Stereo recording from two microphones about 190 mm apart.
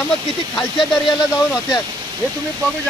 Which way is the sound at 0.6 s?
Centre (ahead or behind).